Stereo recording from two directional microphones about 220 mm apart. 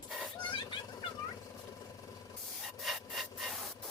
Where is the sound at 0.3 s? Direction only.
20° left (ahead or behind).